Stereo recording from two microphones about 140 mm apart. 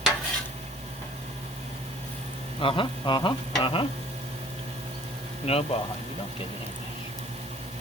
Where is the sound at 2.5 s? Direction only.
40° left (ahead or behind).